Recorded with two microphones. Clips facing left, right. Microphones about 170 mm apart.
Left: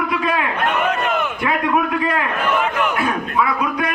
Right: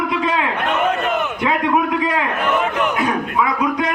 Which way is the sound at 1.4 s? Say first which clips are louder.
Right 2 dB; 20° right (ahead or behind).